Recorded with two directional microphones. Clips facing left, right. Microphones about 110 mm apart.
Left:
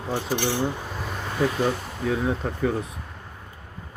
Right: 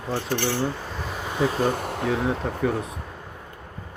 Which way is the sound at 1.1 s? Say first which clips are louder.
Even; 5° right (ahead or behind).